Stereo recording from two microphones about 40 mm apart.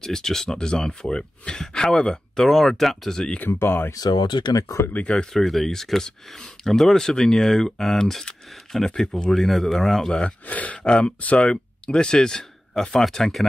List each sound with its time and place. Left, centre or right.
0.0 s speech: centre
2.4 s speech: centre
3.4 s speech: left
4.9 s speech: left
5.3 s speech: centre
10.4 s speech: left
10.8 s speech: left; by 13.5 s centre